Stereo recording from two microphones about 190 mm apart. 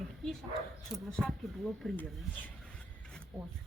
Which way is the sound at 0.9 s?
Centre (ahead or behind).